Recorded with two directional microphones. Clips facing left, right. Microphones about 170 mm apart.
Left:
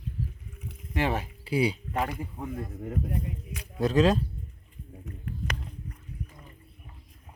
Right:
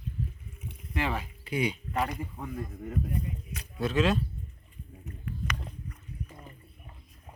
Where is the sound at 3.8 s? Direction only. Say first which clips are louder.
Left 4 dB; 40° left (ahead or behind).